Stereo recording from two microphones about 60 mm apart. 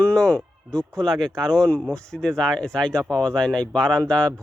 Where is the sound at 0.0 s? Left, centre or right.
Centre.